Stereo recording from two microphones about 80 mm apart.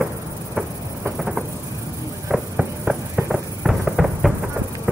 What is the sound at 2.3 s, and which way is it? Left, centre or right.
Insect, centre.